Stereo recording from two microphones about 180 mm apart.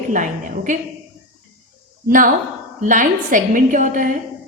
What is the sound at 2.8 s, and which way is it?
A woman's voice, 45° right (ahead or behind).